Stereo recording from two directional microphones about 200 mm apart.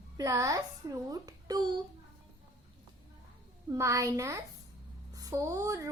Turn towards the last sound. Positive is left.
turn(degrees=-15)  # may be behind; listen again after turning